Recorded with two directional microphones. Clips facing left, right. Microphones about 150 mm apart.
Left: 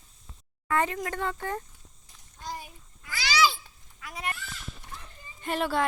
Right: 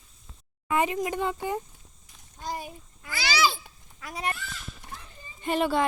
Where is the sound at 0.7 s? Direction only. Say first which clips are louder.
Right 2 dB; 15° right (ahead or behind).